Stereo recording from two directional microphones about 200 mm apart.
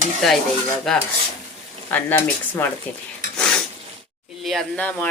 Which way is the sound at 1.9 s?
10° left (ahead or behind).